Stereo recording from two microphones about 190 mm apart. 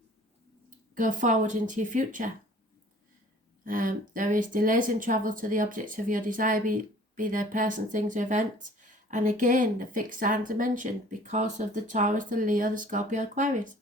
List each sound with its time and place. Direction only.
0.9 s speech: 40° right (ahead or behind)
3.6 s speech: 45° right (ahead or behind)